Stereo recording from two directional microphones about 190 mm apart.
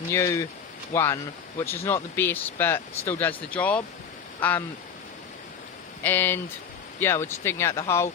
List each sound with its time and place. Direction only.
0.1 s speech: 15° left (ahead or behind)
6.0 s speech: 10° left (ahead or behind)